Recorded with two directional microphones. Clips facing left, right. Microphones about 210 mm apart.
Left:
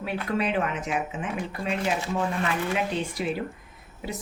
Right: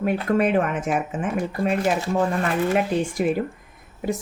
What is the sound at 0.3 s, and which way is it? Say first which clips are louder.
Speech: right 5 dB; 50° right (ahead or behind).